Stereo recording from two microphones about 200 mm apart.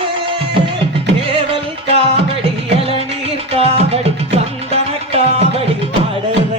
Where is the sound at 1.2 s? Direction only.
25° right (ahead or behind).